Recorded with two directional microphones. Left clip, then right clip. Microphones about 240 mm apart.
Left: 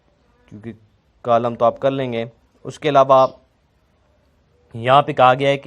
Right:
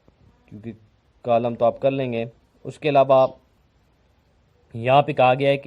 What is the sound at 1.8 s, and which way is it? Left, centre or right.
Speech, centre.